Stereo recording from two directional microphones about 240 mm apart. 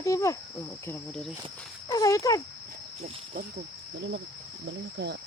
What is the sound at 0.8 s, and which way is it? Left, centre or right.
Speech, centre.